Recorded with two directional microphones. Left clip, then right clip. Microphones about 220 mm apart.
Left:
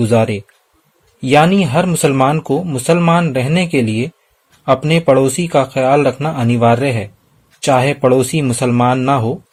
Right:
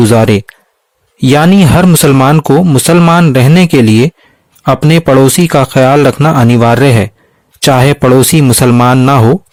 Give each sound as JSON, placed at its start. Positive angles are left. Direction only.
{"t": 0.1, "sound": "speech", "side_deg": -55}